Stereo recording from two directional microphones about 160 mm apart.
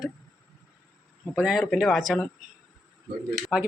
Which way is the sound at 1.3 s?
5° right (ahead or behind).